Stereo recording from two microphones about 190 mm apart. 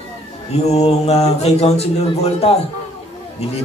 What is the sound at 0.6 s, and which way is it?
Speech, 35° left (ahead or behind).